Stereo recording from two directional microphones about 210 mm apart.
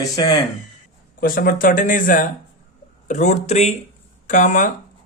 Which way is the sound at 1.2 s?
45° left (ahead or behind).